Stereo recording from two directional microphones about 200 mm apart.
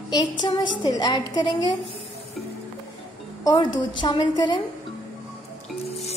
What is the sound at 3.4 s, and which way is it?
A woman's voice, 20° left (ahead or behind).